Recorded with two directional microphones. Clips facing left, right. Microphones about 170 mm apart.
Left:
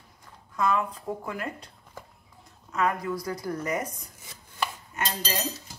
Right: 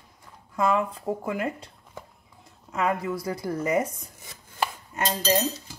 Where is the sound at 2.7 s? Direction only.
25° right (ahead or behind).